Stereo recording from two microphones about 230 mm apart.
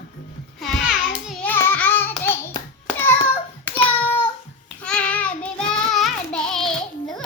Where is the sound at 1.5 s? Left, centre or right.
Centre.